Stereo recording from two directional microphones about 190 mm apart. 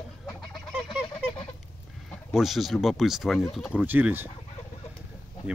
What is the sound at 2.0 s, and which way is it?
Speech, centre (ahead or behind).